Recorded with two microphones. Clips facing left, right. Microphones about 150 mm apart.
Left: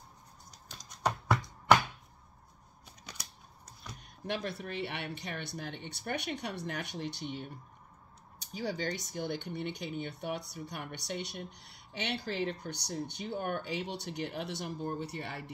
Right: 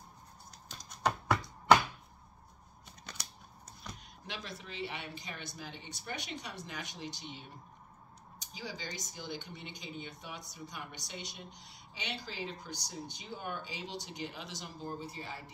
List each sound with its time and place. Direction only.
3.1 s scissors: 10° left (ahead or behind)
4.3 s speech: 55° left (ahead or behind)
8.5 s speech: 60° left (ahead or behind)